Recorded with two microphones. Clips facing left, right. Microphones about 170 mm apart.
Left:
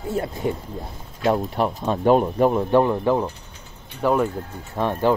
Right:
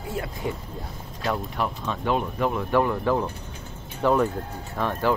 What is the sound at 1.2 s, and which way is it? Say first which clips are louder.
Speech: left 6 dB; 35° left (ahead or behind).